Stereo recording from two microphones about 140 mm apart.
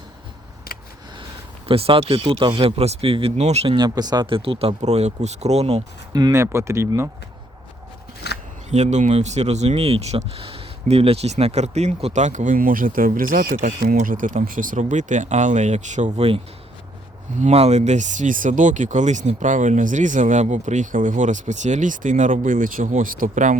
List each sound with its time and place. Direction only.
0.7 s a sound: 90° left
1.6 s speech: 40° right (ahead or behind)
3.8 s speech: 30° right (ahead or behind); by 5.8 s 45° right (ahead or behind)
6.1 s speech: 25° right (ahead or behind)
8.7 s speech: 55° right (ahead or behind); by 13.7 s 90° right
13.9 s speech: 75° right (ahead or behind)